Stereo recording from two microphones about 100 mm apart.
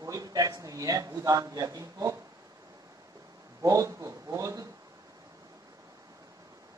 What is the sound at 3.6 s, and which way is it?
A man's voice, 35° right (ahead or behind).